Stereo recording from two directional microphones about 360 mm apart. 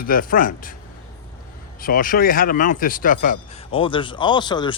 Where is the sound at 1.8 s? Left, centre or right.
Left.